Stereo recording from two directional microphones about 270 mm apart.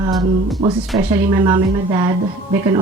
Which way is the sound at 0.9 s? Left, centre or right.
Centre.